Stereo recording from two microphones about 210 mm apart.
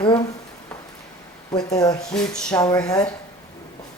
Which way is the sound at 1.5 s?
20° left (ahead or behind).